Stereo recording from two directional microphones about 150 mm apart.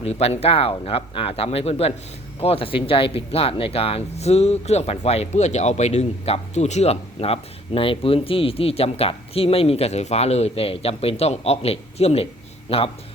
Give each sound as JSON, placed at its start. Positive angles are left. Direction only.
{"t": 0.0, "sound": "speech", "side_deg": 45}